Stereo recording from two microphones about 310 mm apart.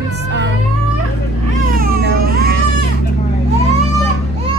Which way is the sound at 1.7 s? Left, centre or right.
Right.